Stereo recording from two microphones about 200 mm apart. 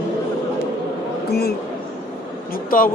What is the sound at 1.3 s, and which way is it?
Speech, 55° left (ahead or behind).